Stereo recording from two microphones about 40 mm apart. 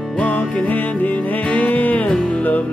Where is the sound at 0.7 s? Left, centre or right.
Left.